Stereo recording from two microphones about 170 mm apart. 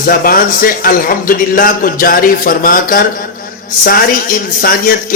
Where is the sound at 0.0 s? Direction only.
60° left (ahead or behind).